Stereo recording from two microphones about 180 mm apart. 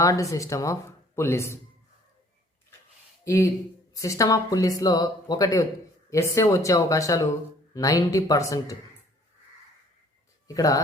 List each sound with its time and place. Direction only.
0.0 s speech: 20° left (ahead or behind)
3.2 s speech: 15° left (ahead or behind)
10.5 s speech: 20° left (ahead or behind)